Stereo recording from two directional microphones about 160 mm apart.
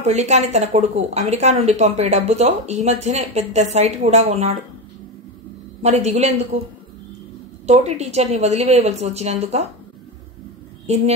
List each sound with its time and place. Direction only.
0.0 s speech: 45° right (ahead or behind)
5.8 s speech: 45° right (ahead or behind)
7.6 s speech: 45° right (ahead or behind)